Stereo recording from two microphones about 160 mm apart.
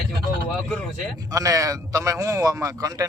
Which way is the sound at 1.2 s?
20° right (ahead or behind).